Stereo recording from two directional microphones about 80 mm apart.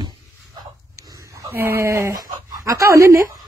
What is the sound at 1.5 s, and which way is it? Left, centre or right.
A woman's voice, right.